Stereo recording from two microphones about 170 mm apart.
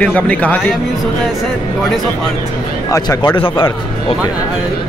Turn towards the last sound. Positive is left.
turn(degrees=25)  # may be behind; listen again after turning